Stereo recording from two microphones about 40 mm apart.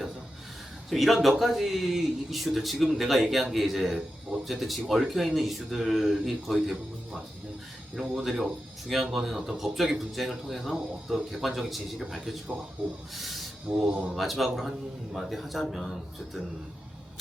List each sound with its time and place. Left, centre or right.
0.9 s a man's voice: centre
8.1 s a man's voice: centre
13.7 s speech: right
14.2 s a man's voice: centre